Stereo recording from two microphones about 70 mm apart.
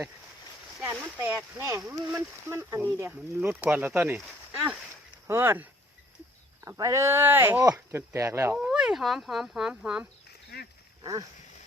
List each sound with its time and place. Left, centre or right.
0.9 s speech: right
1.4 s speech: right
3.1 s speech: right
6.8 s speech: right
7.9 s speech: right
8.5 s speech: centre
11.0 s dog: right